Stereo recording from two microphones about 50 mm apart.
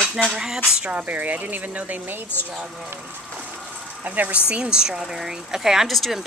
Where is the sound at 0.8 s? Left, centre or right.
Right.